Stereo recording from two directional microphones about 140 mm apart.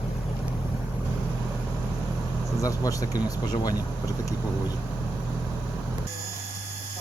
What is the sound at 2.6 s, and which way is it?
Speech, 25° left (ahead or behind).